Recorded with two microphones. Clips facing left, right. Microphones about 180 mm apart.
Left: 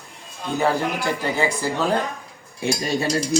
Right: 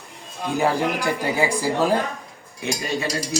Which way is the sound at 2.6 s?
25° left (ahead or behind).